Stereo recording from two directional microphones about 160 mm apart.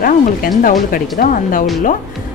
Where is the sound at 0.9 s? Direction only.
60° left (ahead or behind).